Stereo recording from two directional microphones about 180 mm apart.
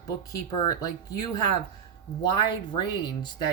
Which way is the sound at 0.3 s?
20° left (ahead or behind).